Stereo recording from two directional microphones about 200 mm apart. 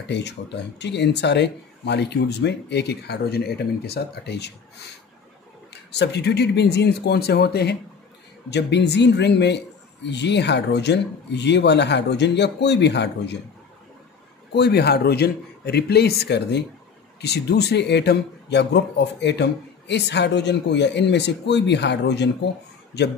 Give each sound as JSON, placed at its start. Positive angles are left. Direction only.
{"t": 0.1, "sound": "speech", "side_deg": 60}
{"t": 5.9, "sound": "speech", "side_deg": 55}
{"t": 14.5, "sound": "speech", "side_deg": 55}